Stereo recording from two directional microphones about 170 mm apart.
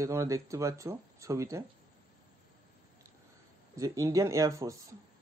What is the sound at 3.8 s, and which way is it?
Speech, 20° right (ahead or behind).